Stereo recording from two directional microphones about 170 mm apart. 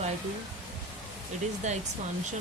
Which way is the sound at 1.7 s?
45° right (ahead or behind).